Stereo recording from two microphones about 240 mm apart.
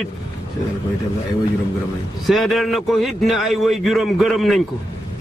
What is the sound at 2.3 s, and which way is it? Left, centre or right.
A man's voice, centre.